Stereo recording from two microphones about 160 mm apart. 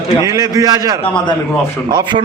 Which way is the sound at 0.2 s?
20° right (ahead or behind).